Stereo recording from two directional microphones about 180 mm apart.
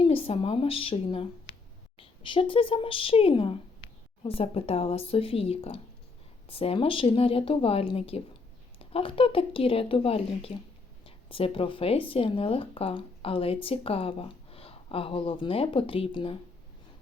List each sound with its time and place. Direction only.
0.0 s speech: 30° left (ahead or behind)